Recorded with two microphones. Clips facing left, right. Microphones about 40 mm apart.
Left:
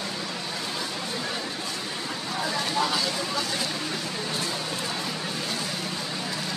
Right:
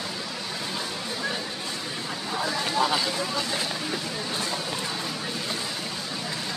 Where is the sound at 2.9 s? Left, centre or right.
Centre.